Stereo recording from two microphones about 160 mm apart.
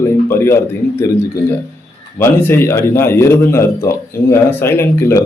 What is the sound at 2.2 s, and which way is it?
A man's voice, 15° left (ahead or behind).